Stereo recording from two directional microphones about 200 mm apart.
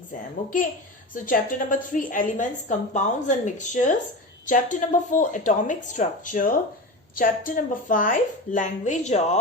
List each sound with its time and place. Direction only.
1.1 s a woman's voice: 40° left (ahead or behind)